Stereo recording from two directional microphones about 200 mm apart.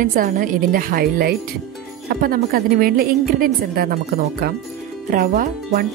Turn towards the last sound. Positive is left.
turn(degrees=-45)  # may be behind; listen again after turning